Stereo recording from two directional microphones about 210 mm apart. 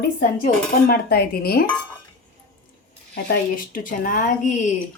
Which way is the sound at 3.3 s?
40° left (ahead or behind).